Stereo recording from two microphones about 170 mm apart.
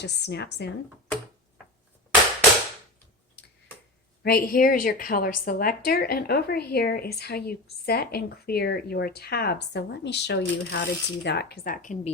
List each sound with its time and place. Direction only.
0.0 s a woman's voice: 80° left
4.2 s a woman's voice: 65° left (ahead or behind)